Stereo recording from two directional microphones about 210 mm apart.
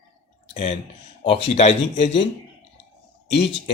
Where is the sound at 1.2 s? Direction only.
25° left (ahead or behind).